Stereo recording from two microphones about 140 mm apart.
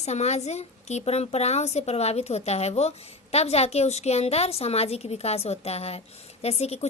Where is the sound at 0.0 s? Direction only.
55° left (ahead or behind).